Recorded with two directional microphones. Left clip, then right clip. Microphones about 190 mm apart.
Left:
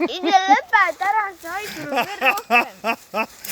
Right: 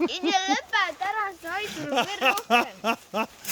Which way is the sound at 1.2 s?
15° left (ahead or behind).